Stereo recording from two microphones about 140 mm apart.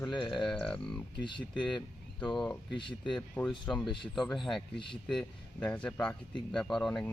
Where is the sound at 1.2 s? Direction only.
35° left (ahead or behind).